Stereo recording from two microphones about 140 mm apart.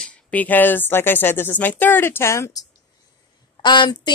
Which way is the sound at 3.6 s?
30° left (ahead or behind).